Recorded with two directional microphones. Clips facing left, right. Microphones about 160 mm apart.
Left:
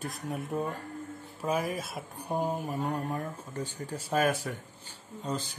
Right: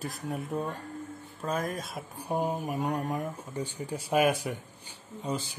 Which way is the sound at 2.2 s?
10° right (ahead or behind).